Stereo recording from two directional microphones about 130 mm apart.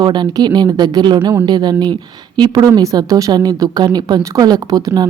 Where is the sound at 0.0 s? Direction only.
35° right (ahead or behind).